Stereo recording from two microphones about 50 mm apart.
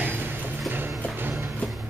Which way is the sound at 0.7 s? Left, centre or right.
Right.